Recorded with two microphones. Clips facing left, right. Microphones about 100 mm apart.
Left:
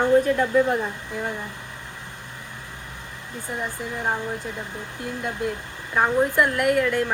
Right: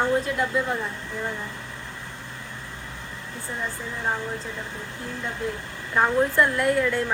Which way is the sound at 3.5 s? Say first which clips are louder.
Left 2 dB; 15° left (ahead or behind).